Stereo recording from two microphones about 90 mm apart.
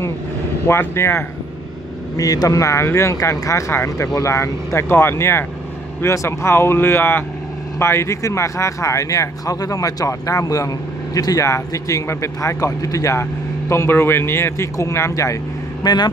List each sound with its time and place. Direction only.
0.7 s speech: 30° left (ahead or behind)
2.1 s speech: 45° left (ahead or behind)
15.8 s speech: 50° left (ahead or behind)